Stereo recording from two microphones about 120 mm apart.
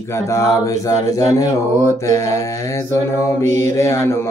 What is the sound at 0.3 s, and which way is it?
Mantra, 25° left (ahead or behind).